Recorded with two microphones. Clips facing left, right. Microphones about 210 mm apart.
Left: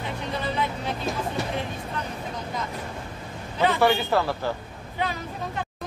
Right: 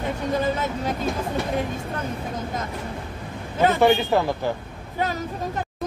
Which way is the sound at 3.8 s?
20° right (ahead or behind).